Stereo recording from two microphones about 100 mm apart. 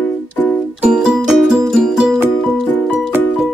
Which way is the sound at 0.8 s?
10° right (ahead or behind).